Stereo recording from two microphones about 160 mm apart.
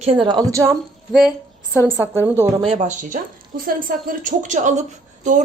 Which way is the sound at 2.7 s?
50° right (ahead or behind).